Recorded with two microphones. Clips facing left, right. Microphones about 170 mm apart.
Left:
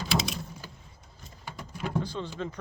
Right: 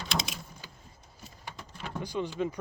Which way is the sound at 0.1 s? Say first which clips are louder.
Left 5 dB; 5° left (ahead or behind).